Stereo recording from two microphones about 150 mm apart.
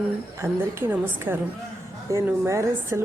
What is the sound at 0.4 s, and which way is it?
A woman's voice, 20° right (ahead or behind).